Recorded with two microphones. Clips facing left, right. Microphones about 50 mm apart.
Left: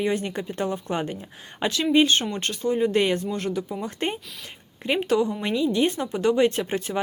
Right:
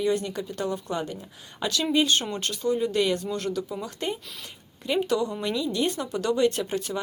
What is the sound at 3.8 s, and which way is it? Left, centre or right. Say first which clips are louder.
Speech: left 3 dB; left.